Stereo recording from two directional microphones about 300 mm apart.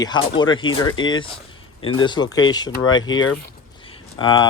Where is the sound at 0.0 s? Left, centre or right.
Centre.